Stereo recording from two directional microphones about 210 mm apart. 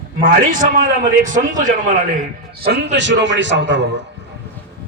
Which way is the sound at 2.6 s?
50° right (ahead or behind).